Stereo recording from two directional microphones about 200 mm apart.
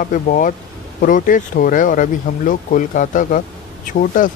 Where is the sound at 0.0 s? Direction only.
40° left (ahead or behind).